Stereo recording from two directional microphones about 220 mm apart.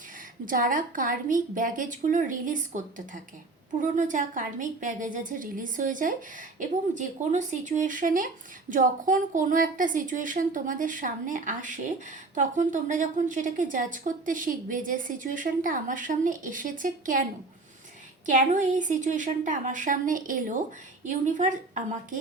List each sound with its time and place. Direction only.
0.4 s a woman's voice: 35° right (ahead or behind)
18.3 s a woman's voice: 35° right (ahead or behind)